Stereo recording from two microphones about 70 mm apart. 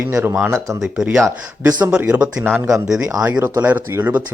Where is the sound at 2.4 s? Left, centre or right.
Right.